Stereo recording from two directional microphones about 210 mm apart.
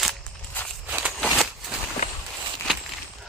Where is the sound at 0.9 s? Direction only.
5° right (ahead or behind).